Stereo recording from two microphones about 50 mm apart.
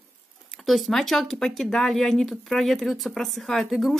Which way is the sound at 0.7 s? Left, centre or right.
Centre.